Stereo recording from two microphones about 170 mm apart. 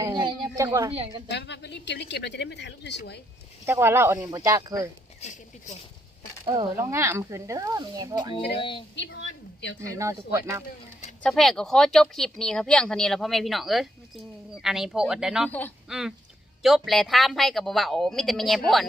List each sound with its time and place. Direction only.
0.0 s a sound: 25° right (ahead or behind)
0.9 s a woman's voice: 35° right (ahead or behind)
1.3 s speech: 90° left
3.7 s speech: 15° right (ahead or behind)
5.2 s speech: 45° left (ahead or behind)
6.7 s speech: 15° right (ahead or behind)
8.5 s speech: 30° left (ahead or behind)
9.0 s speech: 90° left
10.0 s speech: 15° right (ahead or behind)
11.2 s speech: 5° left (ahead or behind)
15.4 s speech: 10° left (ahead or behind)
15.9 s speech: 5° right (ahead or behind)